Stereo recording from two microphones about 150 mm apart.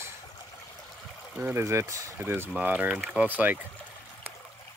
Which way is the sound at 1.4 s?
20° right (ahead or behind).